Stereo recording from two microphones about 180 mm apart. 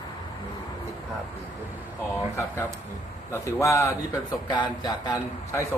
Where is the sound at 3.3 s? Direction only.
15° left (ahead or behind).